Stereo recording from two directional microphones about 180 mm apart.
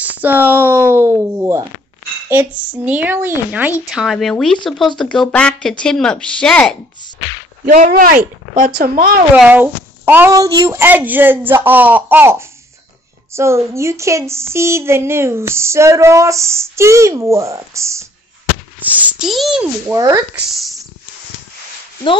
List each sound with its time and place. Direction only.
0.0 s a sound: 10° right (ahead or behind)
4.9 s speech: 5° left (ahead or behind)
7.6 s speech: 50° right (ahead or behind)
9.3 s a sound: 10° right (ahead or behind)
18.8 s a child's voice: 10° right (ahead or behind)
19.9 s speech: 20° right (ahead or behind)
20.4 s speech: centre (ahead or behind)